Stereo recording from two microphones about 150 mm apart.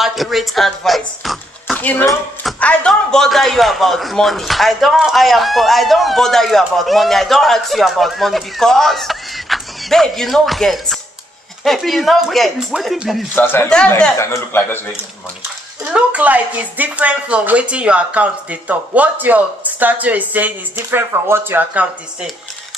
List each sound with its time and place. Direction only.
0.0 s speech: centre (ahead or behind)
1.8 s speech: 10° left (ahead or behind)
13.3 s speech: 15° left (ahead or behind)
14.1 s speech: 20° left (ahead or behind)
15.9 s speech: 10° right (ahead or behind)